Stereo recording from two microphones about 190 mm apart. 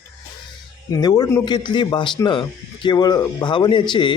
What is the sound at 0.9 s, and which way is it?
Speech, 20° left (ahead or behind).